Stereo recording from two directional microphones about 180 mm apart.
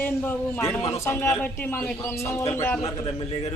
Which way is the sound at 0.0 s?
10° left (ahead or behind).